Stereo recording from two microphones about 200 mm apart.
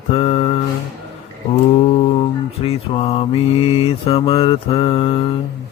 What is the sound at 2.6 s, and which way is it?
Mantra, 30° left (ahead or behind).